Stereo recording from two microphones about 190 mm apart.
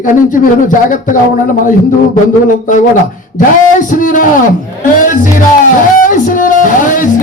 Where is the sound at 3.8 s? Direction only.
45° left (ahead or behind).